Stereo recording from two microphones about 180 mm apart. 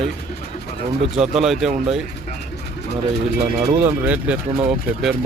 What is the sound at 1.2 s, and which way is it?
Speech, centre (ahead or behind).